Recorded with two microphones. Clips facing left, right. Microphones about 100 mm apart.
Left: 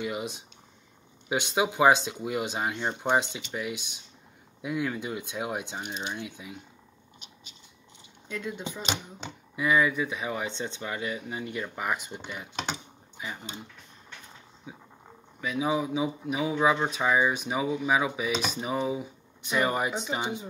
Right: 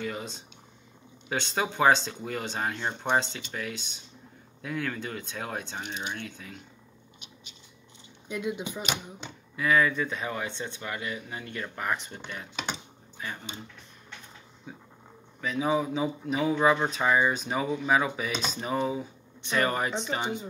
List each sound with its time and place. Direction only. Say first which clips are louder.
0.0 s speech: left 2 dB; 15° left (ahead or behind)
8.3 s speech: right 3 dB; 15° right (ahead or behind)
9.6 s speech: even; 15° left (ahead or behind)
14.7 s speech: even; 10° left (ahead or behind)